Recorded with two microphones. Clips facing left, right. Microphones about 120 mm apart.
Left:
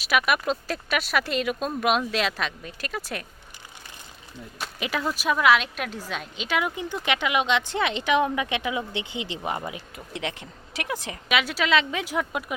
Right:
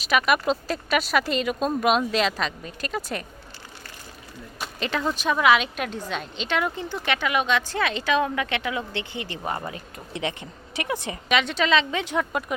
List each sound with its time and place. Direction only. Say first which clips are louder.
0.0 s speech: right 2 dB; centre (ahead or behind)
4.6 s speech: right 2 dB; 5° left (ahead or behind)
10.1 s speech: right 3 dB; centre (ahead or behind)